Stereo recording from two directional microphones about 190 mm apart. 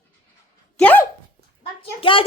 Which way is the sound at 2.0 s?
30° left (ahead or behind).